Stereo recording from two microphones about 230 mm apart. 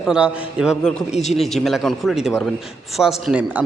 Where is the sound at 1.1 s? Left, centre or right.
Left.